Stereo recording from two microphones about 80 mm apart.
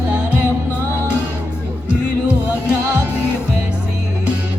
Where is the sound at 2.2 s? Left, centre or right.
Centre.